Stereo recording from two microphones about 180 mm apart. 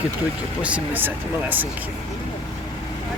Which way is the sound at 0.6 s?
10° right (ahead or behind).